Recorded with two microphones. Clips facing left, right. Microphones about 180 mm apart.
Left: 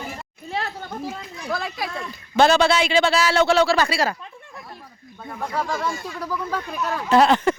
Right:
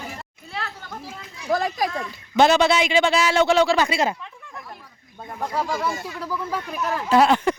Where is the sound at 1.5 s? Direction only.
40° right (ahead or behind).